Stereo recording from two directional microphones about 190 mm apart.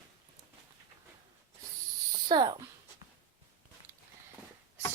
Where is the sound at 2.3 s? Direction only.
25° right (ahead or behind).